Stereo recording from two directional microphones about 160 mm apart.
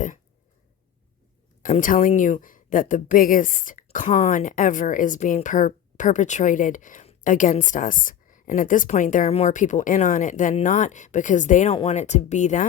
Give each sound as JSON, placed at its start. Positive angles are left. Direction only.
{"t": 1.6, "sound": "a woman's voice", "side_deg": 55}